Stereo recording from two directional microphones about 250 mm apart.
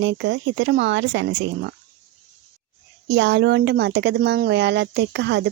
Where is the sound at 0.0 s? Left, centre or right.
Right.